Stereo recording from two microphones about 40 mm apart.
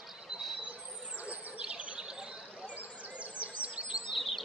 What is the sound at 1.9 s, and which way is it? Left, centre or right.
Bird, centre.